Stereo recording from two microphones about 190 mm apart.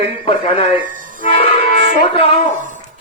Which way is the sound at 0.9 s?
45° right (ahead or behind).